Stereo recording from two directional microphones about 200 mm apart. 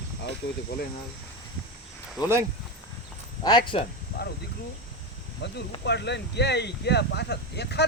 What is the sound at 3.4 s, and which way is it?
Speech, 20° left (ahead or behind).